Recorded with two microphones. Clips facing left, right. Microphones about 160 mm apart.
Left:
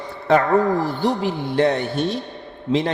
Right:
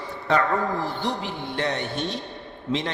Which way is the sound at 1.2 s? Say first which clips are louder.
Left 9 dB; 35° left (ahead or behind).